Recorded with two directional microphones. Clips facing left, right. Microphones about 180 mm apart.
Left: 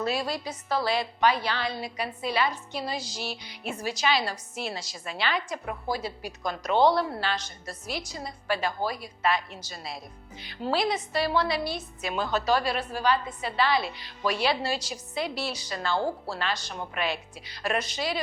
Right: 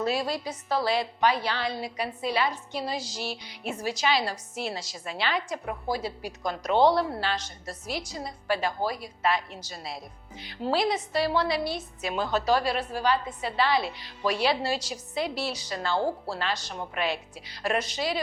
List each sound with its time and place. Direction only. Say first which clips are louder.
0.0 s a woman's voice: right 1 dB; 25° right (ahead or behind)
0.9 s a woman's voice: left 1 dB; 35° right (ahead or behind)
6.7 s a woman's voice: right 1 dB; 5° right (ahead or behind)
7.2 s a woman's voice: right 1 dB; 35° right (ahead or behind)
16.0 s speech: right 1 dB; 10° right (ahead or behind)
16.4 s a woman's voice: even; 35° right (ahead or behind)